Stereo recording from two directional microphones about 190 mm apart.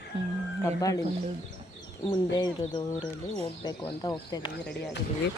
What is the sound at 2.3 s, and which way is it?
Speech, 20° left (ahead or behind).